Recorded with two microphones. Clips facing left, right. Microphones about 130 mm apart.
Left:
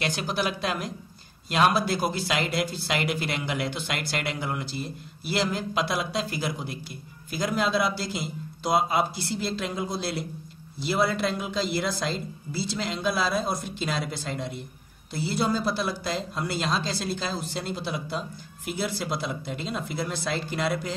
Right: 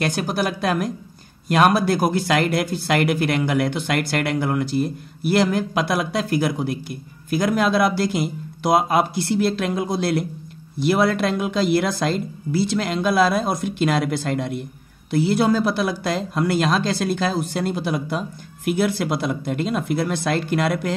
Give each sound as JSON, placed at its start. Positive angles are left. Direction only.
{"t": 0.0, "sound": "speech", "side_deg": -50}